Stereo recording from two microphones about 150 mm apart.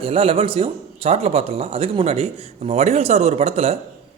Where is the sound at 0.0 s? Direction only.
40° right (ahead or behind).